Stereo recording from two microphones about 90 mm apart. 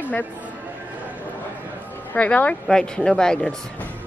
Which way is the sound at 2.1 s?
15° left (ahead or behind).